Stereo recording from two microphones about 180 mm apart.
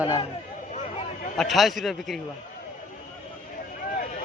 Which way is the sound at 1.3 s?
Centre (ahead or behind).